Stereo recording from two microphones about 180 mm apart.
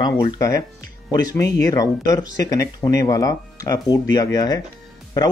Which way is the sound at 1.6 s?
20° left (ahead or behind).